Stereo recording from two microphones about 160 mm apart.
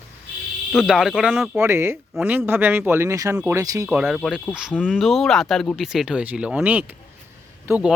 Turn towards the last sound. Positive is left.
turn(degrees=-10)  # may be behind; listen again after turning